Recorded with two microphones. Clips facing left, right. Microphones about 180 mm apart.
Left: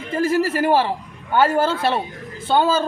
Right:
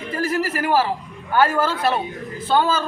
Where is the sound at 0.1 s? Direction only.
25° left (ahead or behind).